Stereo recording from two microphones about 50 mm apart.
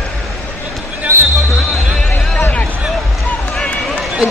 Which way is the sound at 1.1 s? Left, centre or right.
Right.